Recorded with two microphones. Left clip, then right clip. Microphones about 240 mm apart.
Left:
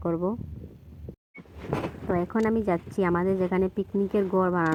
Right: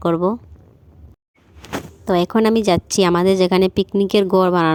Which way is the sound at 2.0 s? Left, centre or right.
Right.